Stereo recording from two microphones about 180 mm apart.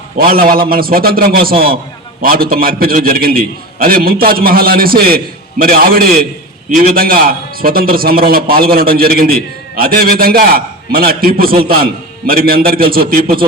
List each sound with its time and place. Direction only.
0.2 s a man's voice: 55° right (ahead or behind)